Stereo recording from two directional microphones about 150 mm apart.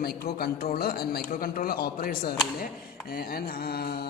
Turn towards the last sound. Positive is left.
turn(degrees=90)